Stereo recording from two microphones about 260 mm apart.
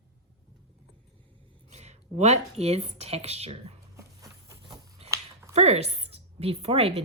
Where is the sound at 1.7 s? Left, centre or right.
Right.